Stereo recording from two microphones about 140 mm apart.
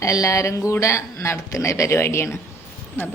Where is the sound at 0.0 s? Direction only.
25° left (ahead or behind).